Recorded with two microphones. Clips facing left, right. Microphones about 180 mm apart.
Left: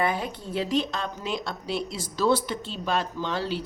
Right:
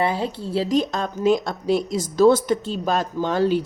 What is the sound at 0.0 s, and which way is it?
A woman's voice, 30° right (ahead or behind).